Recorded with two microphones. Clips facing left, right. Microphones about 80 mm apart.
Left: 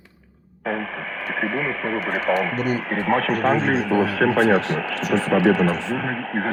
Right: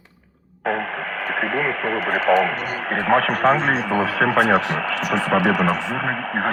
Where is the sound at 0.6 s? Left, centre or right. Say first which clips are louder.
Right 3 dB; right.